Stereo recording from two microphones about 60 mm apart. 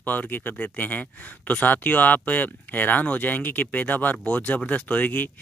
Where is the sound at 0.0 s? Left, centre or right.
Left.